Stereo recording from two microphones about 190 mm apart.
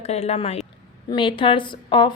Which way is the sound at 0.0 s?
35° left (ahead or behind).